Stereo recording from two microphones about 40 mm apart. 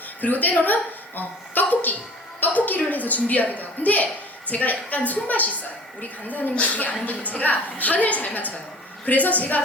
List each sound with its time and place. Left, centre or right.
0.2 s a woman's voice: left